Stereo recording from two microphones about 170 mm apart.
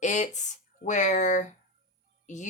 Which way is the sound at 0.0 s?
45° left (ahead or behind).